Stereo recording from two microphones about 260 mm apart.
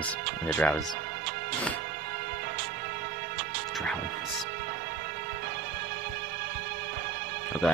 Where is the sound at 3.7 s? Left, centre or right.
Centre.